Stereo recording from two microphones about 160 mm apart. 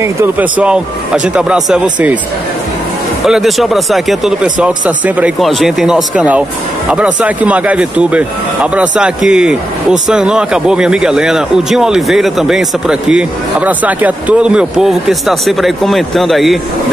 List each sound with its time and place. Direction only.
0.0 s speech: 10° right (ahead or behind)
3.3 s a man's voice: centre (ahead or behind)